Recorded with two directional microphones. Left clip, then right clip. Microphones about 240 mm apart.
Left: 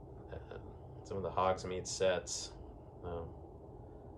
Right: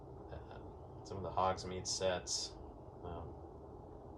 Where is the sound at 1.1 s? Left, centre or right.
Centre.